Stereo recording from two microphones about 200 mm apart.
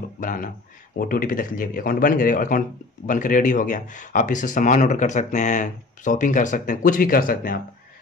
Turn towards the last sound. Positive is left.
turn(degrees=45)  # may be behind; listen again after turning